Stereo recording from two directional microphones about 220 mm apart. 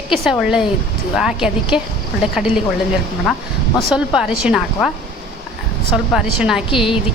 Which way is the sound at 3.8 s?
5° right (ahead or behind).